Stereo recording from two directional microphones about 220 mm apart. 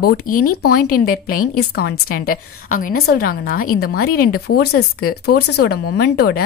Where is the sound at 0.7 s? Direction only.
40° left (ahead or behind).